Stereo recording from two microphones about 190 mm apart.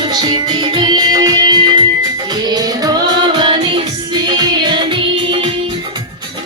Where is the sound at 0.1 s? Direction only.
20° right (ahead or behind).